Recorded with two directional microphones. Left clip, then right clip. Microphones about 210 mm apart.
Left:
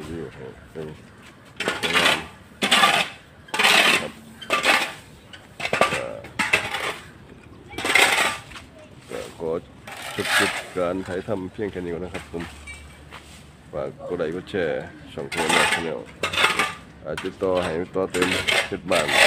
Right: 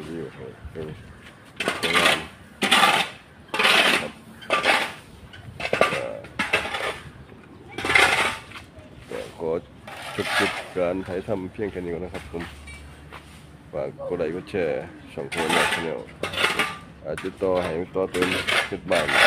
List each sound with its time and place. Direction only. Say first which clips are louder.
1.6 s coin: even; 5° left (ahead or behind)
2.6 s a sound: even; 15° left (ahead or behind)
3.5 s a sound: left 1 dB; 45° left (ahead or behind)
4.5 s dishes: left 1 dB; 50° left (ahead or behind)
5.6 s a sound: even; 50° left (ahead or behind)
9.4 s vehicle: even; centre (ahead or behind)
9.8 s a sound: left 4 dB; 45° left (ahead or behind)
10.8 s speech: right 1 dB; 5° left (ahead or behind)
13.7 s speech: even; 5° left (ahead or behind)
15.2 s filing: left 2 dB; 30° left (ahead or behind)
16.2 s dishes: left 3 dB; 30° left (ahead or behind)
17.0 s speech: left 1 dB; 10° left (ahead or behind)
18.1 s filing: left 2 dB; 35° left (ahead or behind)